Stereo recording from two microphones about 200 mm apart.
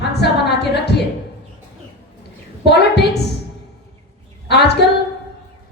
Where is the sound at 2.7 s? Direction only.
55° left (ahead or behind).